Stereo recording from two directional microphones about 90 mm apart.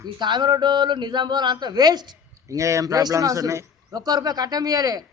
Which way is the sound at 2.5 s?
35° right (ahead or behind).